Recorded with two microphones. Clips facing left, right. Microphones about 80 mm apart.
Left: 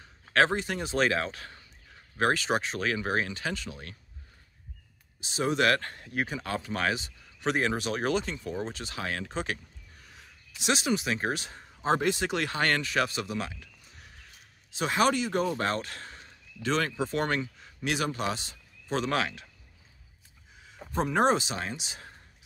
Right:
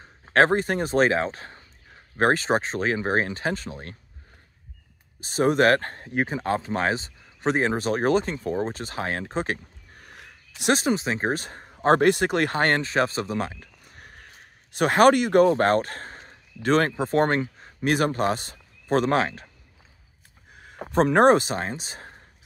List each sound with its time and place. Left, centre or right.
0.0 s speech: right
5.2 s speech: right
10.7 s speech: right
11.9 s speech: right
15.4 s speech: right
20.5 s speech: right